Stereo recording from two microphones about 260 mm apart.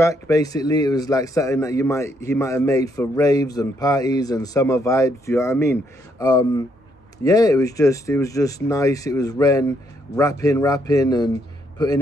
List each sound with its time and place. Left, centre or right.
0.0 s a man's voice: centre